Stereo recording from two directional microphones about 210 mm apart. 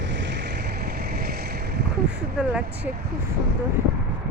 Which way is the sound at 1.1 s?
45° right (ahead or behind).